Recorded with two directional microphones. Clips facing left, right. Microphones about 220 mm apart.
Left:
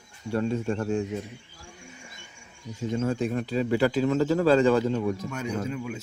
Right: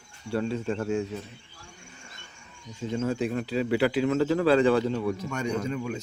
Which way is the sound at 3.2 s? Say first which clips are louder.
Left 1 dB; 45° left (ahead or behind).